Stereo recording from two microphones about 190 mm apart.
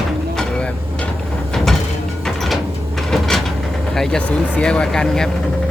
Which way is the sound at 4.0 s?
5° left (ahead or behind).